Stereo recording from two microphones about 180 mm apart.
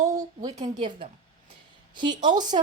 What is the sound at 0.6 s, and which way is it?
Speech, 20° right (ahead or behind).